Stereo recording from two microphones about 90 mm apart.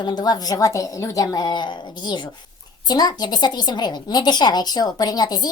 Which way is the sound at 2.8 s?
50° left (ahead or behind).